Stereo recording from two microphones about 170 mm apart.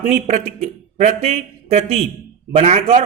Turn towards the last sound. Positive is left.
turn(degrees=-40)  # may be behind; listen again after turning